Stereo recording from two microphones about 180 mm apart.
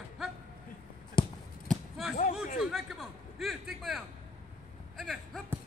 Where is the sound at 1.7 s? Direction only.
Centre (ahead or behind).